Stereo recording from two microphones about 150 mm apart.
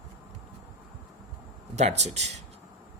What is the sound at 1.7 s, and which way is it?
Speech, 50° right (ahead or behind).